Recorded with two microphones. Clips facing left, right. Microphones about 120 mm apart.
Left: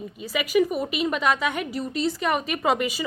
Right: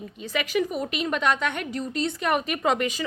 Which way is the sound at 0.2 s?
5° left (ahead or behind).